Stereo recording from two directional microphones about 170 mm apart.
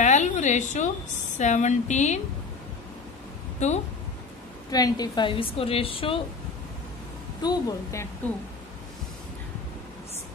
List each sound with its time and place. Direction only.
0.0 s a sound: 45° left (ahead or behind)
1.4 s a woman's voice: 45° left (ahead or behind)
3.5 s a woman's voice: 40° left (ahead or behind)
4.6 s a woman's voice: 20° left (ahead or behind)
7.4 s a woman's voice: 15° left (ahead or behind)